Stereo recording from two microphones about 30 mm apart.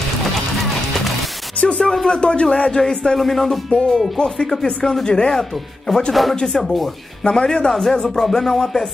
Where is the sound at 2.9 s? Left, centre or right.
Left.